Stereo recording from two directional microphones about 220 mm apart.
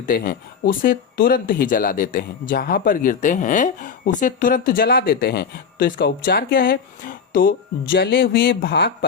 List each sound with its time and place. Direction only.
0.0 s speech: 40° left (ahead or behind)